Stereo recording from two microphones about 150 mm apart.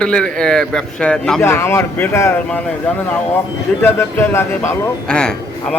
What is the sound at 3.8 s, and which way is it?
Speech, 15° left (ahead or behind).